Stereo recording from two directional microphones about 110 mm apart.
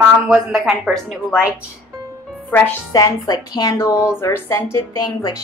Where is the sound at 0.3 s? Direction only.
5° right (ahead or behind).